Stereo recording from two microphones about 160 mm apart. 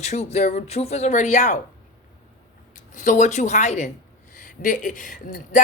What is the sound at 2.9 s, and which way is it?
Speech, 50° left (ahead or behind).